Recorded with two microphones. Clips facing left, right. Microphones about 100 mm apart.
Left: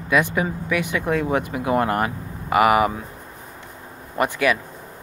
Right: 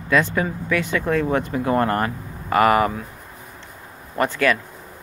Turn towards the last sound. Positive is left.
turn(degrees=15)  # may be behind; listen again after turning